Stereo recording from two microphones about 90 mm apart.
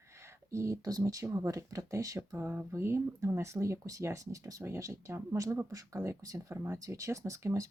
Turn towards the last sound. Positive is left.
turn(degrees=-35)  # may be behind; listen again after turning